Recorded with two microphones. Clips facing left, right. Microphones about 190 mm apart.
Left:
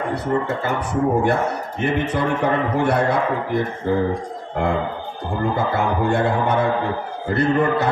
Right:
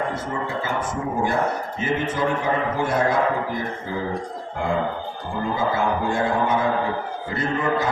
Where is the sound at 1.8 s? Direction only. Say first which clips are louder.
Left 3 dB; 65° left (ahead or behind).